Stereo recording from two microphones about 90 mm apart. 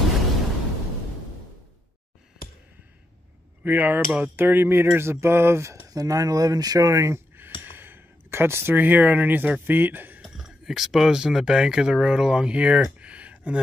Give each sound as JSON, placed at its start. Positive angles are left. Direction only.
{"t": 3.6, "sound": "a sound", "side_deg": -20}
{"t": 5.9, "sound": "speech", "side_deg": -40}
{"t": 10.3, "sound": "speech", "side_deg": -5}